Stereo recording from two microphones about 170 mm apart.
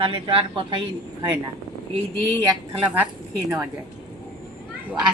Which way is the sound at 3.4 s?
10° right (ahead or behind).